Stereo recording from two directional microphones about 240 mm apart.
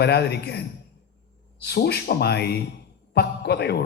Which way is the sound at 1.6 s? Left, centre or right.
Left.